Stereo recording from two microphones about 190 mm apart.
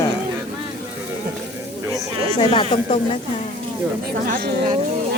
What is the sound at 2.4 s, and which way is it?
Speech, 25° left (ahead or behind).